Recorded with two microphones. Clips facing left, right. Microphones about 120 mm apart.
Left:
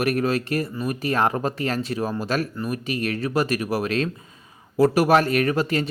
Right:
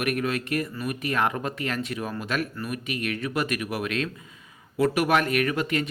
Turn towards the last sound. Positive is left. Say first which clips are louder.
# left 4 dB
turn(degrees=35)  # may be behind; listen again after turning